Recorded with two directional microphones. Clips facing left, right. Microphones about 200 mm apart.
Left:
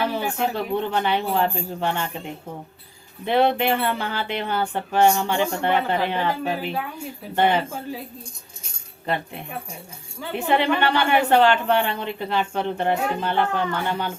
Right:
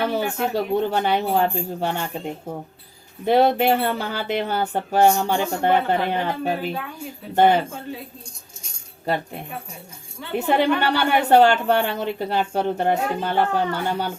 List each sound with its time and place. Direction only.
0.0 s speech: 40° right (ahead or behind)
10.3 s speech: 40° right (ahead or behind)